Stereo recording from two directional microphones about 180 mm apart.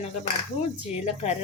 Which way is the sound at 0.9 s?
40° left (ahead or behind).